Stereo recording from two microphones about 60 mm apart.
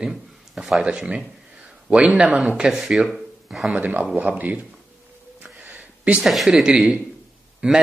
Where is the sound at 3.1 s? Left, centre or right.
Centre.